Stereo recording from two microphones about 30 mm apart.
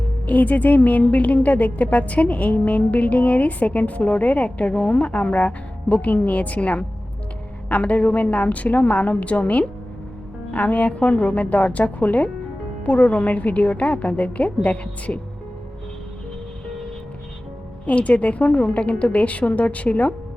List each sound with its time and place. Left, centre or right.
0.3 s a woman's voice: left
17.8 s a woman's voice: left